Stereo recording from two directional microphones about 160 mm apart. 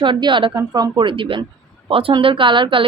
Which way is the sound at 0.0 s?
30° right (ahead or behind).